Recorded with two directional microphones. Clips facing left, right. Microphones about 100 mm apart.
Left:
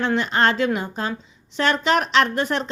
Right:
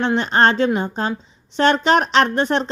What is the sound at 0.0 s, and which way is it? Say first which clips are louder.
Speech: right 3 dB; 30° right (ahead or behind).